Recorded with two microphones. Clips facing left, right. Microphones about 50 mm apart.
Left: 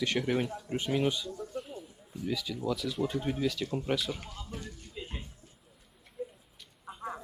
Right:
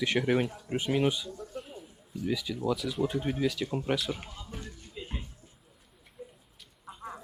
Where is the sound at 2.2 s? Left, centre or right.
Centre.